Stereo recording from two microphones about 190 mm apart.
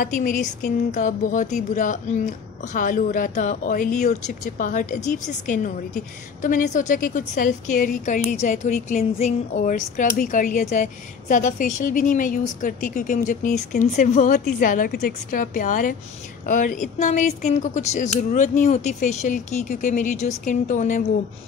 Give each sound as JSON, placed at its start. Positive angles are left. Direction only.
{"t": 0.0, "sound": "a woman's voice", "side_deg": 45}